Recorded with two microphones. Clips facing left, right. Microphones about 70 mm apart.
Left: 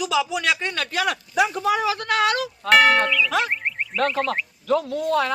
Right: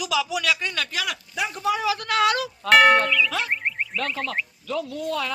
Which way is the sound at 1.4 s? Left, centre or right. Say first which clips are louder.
Left 4 dB; left.